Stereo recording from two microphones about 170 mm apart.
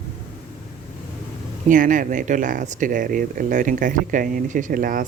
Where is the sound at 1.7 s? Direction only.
50° right (ahead or behind).